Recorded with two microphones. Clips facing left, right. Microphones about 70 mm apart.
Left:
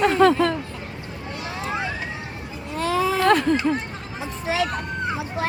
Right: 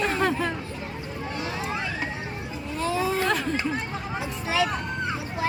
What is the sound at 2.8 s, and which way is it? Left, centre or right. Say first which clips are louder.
Speech: left 5 dB; left.